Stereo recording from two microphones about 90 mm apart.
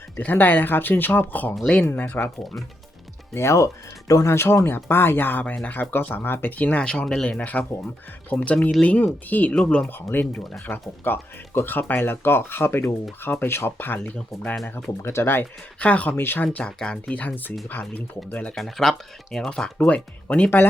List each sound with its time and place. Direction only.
0.2 s speech: 20° left (ahead or behind)
3.3 s speech: 35° left (ahead or behind); by 9.6 s 20° left (ahead or behind)
9.6 s speech: 5° left (ahead or behind)
10.1 s speech: 20° left (ahead or behind)
14.5 s speech: 5° left (ahead or behind)
14.8 s speech: 25° left (ahead or behind)
18.5 s speech: centre (ahead or behind)